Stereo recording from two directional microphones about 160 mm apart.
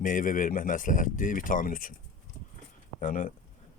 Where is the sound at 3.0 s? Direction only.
55° left (ahead or behind).